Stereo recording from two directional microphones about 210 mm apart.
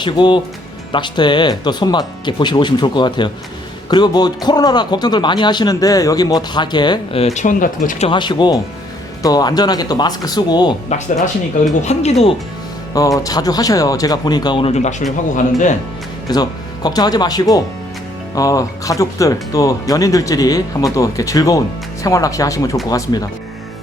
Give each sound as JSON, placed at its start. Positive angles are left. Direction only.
{"t": 0.0, "sound": "speech", "side_deg": 20}
{"t": 7.3, "sound": "speech", "side_deg": 35}
{"t": 11.8, "sound": "speech", "side_deg": 30}
{"t": 12.9, "sound": "speech", "side_deg": 15}
{"t": 16.3, "sound": "speech", "side_deg": 20}